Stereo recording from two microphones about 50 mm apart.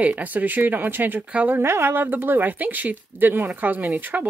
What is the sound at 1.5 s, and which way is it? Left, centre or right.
Speech, right.